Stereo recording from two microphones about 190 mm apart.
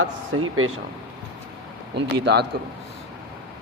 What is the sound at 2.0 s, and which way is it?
Speech, 65° right (ahead or behind).